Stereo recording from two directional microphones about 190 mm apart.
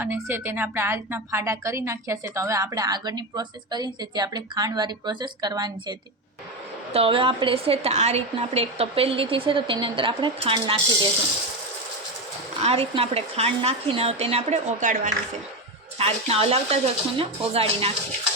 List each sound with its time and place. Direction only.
0.0 s a woman's voice: 10° right (ahead or behind); by 10.8 s 30° right (ahead or behind)
12.5 s a woman's voice: 30° right (ahead or behind)